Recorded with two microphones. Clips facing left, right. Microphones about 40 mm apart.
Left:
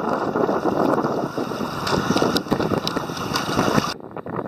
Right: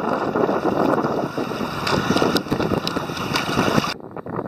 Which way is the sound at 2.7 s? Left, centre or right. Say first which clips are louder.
Even; right.